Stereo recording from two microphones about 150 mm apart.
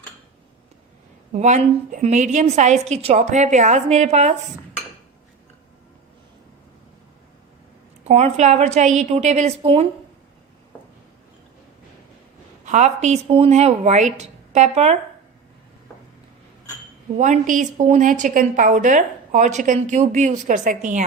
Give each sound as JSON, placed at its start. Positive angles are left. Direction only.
{"t": 1.3, "sound": "a woman's voice", "side_deg": -50}
{"t": 8.0, "sound": "a woman's voice", "side_deg": -45}
{"t": 12.6, "sound": "a woman's voice", "side_deg": -50}
{"t": 13.2, "sound": "a woman's voice", "side_deg": -40}
{"t": 17.2, "sound": "a woman's voice", "side_deg": -55}